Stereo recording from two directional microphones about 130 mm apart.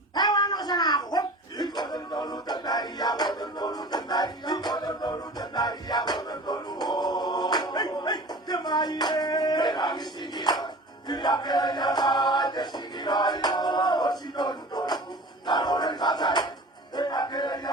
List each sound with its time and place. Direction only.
0.1 s a sound: 35° left (ahead or behind)
11.1 s choir: 35° left (ahead or behind)
15.4 s crowd: 35° left (ahead or behind)
16.9 s music: 35° left (ahead or behind)